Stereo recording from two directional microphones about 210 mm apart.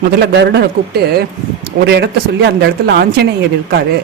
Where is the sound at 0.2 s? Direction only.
55° right (ahead or behind).